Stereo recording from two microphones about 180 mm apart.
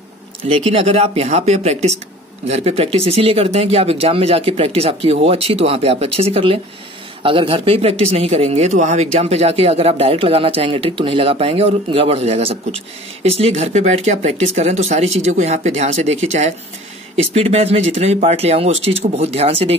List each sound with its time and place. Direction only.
0.5 s speech: 35° right (ahead or behind)